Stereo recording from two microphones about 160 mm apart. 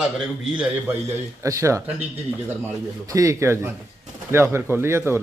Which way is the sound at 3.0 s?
20° right (ahead or behind).